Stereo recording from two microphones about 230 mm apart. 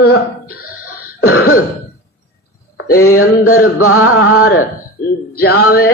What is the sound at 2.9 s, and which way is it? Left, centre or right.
Mantra, left.